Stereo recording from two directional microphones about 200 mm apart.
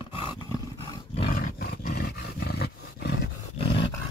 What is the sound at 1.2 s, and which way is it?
Roar, 45° left (ahead or behind).